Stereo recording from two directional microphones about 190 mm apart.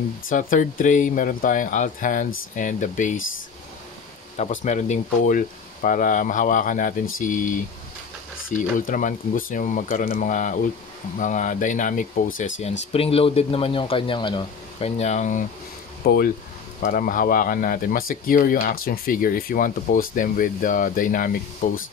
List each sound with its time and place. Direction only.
0.3 s speech: 45° left (ahead or behind)
4.4 s speech: 40° left (ahead or behind)
12.9 s speech: 30° left (ahead or behind)
16.0 s speech: 50° left (ahead or behind)